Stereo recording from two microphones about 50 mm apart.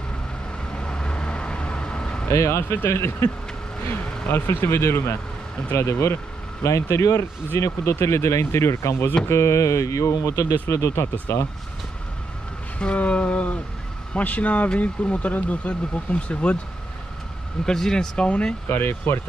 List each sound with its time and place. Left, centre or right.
0.7 s vehicle: centre
2.2 s speech: left
2.8 s speech: left
3.8 s speech: left
5.8 s speech: left
9.3 s speech: left
12.7 s speech: left
17.6 s speech: centre
18.7 s speech: left